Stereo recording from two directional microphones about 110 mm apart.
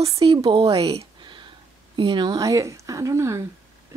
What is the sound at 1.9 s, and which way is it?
Speech, 45° right (ahead or behind).